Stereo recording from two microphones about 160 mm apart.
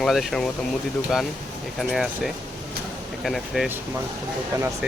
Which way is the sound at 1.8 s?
Centre (ahead or behind).